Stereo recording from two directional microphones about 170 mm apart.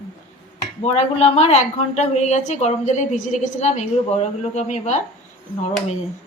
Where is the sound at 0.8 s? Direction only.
40° left (ahead or behind).